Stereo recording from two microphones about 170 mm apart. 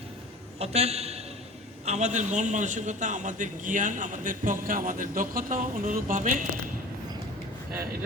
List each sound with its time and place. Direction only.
0.6 s a man's voice: 40° right (ahead or behind)